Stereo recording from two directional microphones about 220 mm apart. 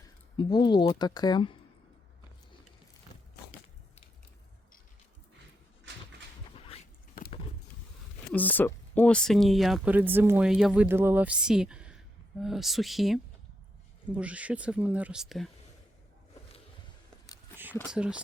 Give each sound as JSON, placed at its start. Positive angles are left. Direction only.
{"t": 0.3, "sound": "speech", "side_deg": 20}
{"t": 6.6, "sound": "a sound", "side_deg": 25}
{"t": 8.3, "sound": "speech", "side_deg": 5}
{"t": 17.9, "sound": "speech", "side_deg": -5}